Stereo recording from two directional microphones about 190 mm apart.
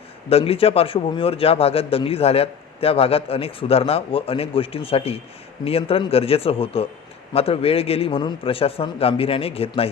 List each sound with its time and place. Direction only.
0.3 s a man's voice: 30° left (ahead or behind)